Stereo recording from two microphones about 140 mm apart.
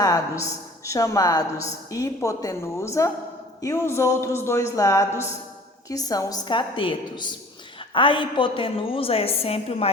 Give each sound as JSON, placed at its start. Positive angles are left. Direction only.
{"t": 0.0, "sound": "a woman's voice", "side_deg": 25}